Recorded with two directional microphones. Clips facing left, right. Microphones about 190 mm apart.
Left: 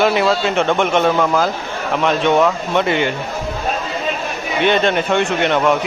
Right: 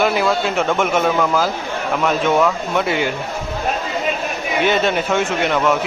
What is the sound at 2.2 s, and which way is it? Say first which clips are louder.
Speech: left 2 dB; 20° left (ahead or behind).